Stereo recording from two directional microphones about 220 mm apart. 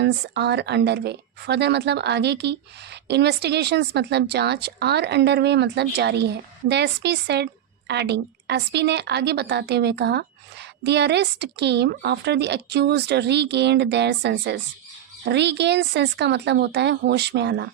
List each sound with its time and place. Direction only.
0.0 s a woman's voice: 50° right (ahead or behind)